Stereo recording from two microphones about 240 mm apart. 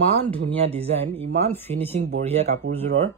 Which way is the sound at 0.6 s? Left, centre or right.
Right.